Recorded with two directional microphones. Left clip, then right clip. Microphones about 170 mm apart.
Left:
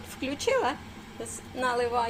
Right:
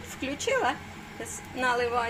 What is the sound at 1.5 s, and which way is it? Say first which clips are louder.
Speech: even; 5° right (ahead or behind).